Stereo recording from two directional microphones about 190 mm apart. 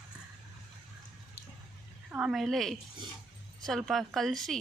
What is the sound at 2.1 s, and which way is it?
A woman's voice, 5° right (ahead or behind).